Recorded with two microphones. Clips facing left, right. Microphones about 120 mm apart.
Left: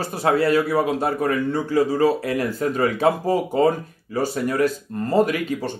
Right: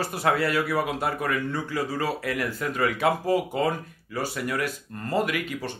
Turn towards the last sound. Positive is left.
turn(degrees=30)  # may be behind; listen again after turning